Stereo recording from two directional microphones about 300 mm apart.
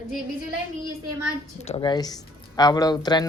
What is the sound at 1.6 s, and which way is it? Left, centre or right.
Speech, centre.